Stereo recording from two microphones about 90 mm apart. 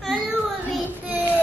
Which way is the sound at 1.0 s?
20° right (ahead or behind).